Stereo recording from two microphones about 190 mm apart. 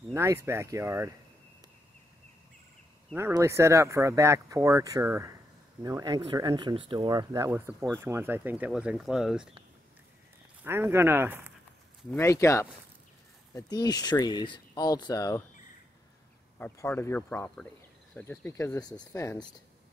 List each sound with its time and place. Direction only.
0.1 s speech: 15° right (ahead or behind)
3.2 s speech: 15° right (ahead or behind)
10.6 s speech: 10° right (ahead or behind)
12.1 s speech: 15° left (ahead or behind)
16.5 s speech: 10° left (ahead or behind)